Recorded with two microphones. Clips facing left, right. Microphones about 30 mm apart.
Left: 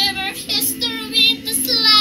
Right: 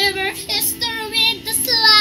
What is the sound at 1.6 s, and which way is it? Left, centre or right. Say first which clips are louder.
Child singing: right 2 dB; centre.